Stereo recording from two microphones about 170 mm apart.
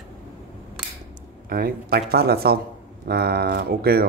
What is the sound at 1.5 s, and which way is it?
Speech, 60° right (ahead or behind).